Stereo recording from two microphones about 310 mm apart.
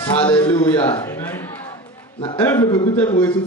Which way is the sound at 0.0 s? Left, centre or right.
Centre.